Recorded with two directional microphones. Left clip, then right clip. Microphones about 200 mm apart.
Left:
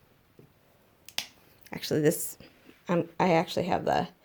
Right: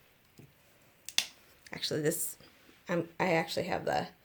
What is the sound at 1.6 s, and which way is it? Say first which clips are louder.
A woman's voice: left 6 dB; 35° left (ahead or behind).